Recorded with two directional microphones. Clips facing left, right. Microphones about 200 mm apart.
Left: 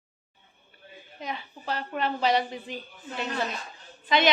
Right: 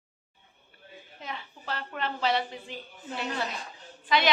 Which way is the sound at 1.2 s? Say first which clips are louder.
Left 4 dB; 15° left (ahead or behind).